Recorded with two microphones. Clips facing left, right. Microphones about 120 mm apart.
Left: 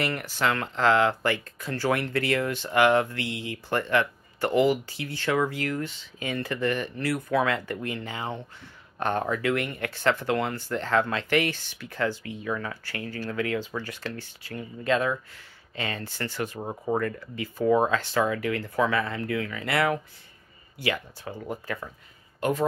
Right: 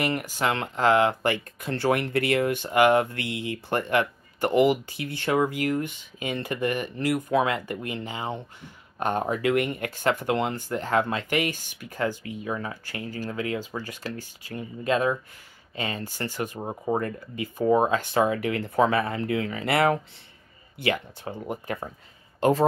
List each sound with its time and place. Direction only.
0.0 s speech: 15° right (ahead or behind)
11.5 s speech: 45° right (ahead or behind)
11.8 s speech: 15° right (ahead or behind)
22.4 s speech: 35° right (ahead or behind)